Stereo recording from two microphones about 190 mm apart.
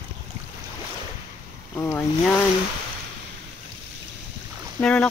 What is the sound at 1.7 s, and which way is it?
Speech, 10° left (ahead or behind).